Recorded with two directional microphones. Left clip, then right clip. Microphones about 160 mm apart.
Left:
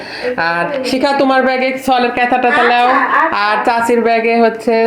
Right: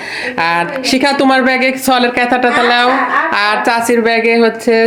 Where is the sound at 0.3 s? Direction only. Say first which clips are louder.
Right 2 dB; 30° right (ahead or behind).